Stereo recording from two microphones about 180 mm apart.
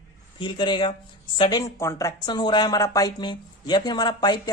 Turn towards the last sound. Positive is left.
turn(degrees=20)  # may be behind; listen again after turning